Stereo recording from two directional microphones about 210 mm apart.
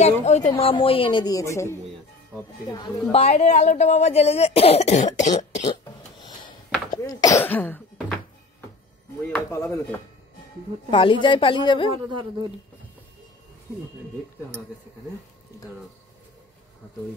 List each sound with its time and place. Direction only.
0.0 s a woman's voice: 30° left (ahead or behind); by 1.8 s 15° left (ahead or behind)
2.7 s a woman's voice: 25° left (ahead or behind)
6.9 s speech: 15° left (ahead or behind)
9.3 s speech: 10° left (ahead or behind)
10.9 s a woman's voice: 25° left (ahead or behind)
11.9 s speech: 20° right (ahead or behind)